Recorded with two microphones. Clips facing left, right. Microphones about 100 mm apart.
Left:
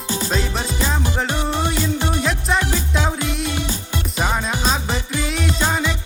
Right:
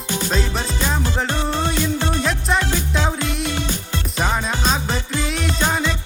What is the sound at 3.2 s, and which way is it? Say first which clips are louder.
Music: even; centre (ahead or behind).